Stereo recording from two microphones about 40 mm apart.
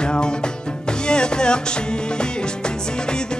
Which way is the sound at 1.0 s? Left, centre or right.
Left.